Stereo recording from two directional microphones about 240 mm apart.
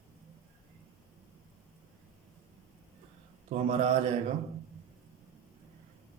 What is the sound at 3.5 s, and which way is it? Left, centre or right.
Speech, right.